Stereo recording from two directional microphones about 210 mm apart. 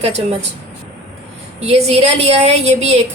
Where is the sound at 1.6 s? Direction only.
30° right (ahead or behind).